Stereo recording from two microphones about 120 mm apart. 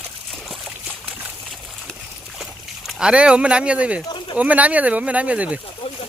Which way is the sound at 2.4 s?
5° right (ahead or behind).